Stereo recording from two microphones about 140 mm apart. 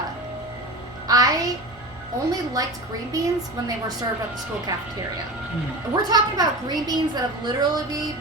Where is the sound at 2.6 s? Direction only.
25° right (ahead or behind).